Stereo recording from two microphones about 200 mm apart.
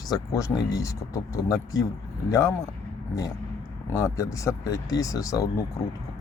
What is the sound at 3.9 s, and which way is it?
Speech, 15° left (ahead or behind).